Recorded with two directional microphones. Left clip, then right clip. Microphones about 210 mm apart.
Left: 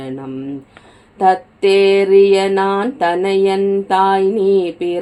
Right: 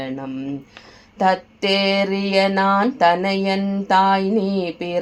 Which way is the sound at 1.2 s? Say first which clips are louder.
Left 5 dB; 20° right (ahead or behind).